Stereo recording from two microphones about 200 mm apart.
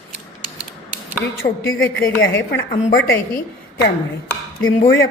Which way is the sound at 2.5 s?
55° left (ahead or behind).